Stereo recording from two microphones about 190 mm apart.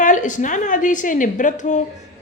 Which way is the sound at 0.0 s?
40° left (ahead or behind).